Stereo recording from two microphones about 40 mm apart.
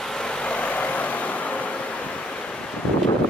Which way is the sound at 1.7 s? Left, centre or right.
Left.